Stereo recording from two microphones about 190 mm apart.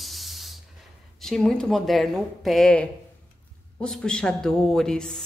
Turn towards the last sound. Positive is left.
turn(degrees=5)  # may be behind; listen again after turning